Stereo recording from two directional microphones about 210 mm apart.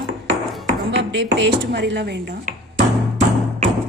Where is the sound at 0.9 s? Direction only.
55° right (ahead or behind).